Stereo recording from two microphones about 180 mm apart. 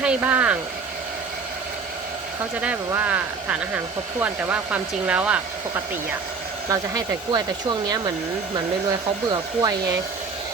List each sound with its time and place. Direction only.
0.0 s speech: 10° right (ahead or behind)
2.6 s speech: 10° right (ahead or behind)
6.7 s speech: 20° right (ahead or behind)
8.5 s speech: 25° right (ahead or behind)